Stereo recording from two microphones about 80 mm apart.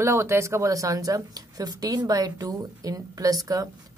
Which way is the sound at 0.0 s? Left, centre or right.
Right.